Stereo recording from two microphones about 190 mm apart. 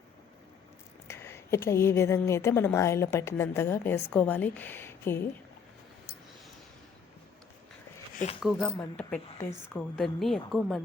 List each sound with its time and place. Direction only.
1.0 s speech: 15° left (ahead or behind)
8.1 s speech: 40° left (ahead or behind)
8.4 s a woman's voice: centre (ahead or behind)